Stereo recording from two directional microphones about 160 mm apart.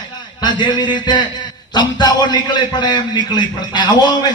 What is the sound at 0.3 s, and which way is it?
A man's voice, 30° left (ahead or behind).